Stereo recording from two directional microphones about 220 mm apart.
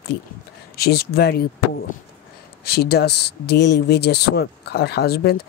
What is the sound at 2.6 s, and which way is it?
Speech, 45° left (ahead or behind).